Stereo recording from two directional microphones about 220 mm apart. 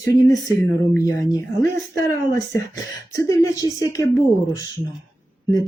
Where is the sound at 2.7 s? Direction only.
15° left (ahead or behind).